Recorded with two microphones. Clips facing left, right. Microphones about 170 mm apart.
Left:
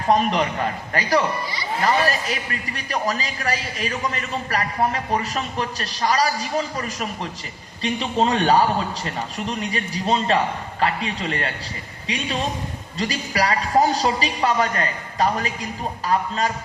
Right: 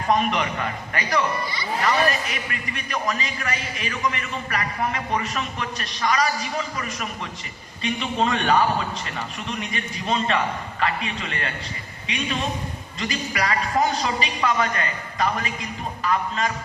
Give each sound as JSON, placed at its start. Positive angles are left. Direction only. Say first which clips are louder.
{"t": 0.1, "sound": "a man's voice", "louder": "left 3 dB", "side_deg": 35}